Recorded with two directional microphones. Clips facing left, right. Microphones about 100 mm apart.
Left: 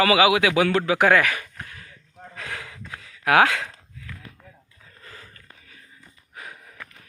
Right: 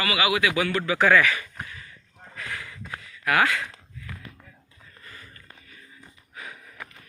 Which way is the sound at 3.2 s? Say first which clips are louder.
Left 5 dB; 90° left.